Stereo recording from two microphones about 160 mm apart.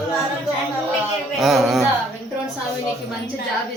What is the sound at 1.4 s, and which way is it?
Speech, centre (ahead or behind).